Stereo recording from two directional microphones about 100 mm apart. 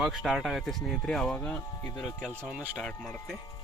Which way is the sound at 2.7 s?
10° left (ahead or behind).